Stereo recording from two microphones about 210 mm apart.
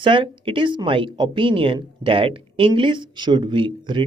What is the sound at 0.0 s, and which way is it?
Speech, 25° right (ahead or behind).